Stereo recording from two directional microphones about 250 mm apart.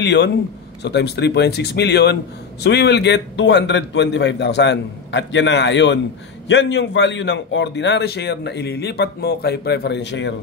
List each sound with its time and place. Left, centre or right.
0.0 s a man's voice: left